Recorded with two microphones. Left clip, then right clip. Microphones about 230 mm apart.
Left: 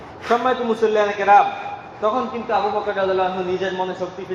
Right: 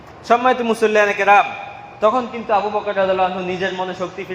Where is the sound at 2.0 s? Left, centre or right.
Right.